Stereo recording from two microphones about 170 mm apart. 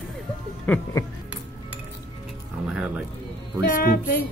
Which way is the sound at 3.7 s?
60° left (ahead or behind).